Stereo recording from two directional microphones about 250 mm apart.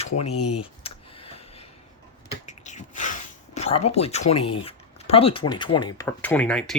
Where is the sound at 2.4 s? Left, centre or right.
Left.